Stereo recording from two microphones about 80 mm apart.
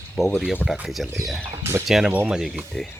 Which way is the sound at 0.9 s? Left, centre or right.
Centre.